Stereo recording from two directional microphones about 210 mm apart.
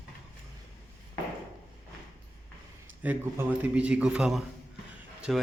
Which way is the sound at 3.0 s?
10° right (ahead or behind).